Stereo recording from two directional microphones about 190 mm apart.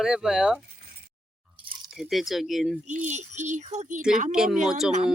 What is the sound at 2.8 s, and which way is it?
Speech, 40° right (ahead or behind).